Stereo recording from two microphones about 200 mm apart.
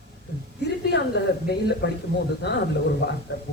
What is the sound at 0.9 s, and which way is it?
Speech, 60° left (ahead or behind).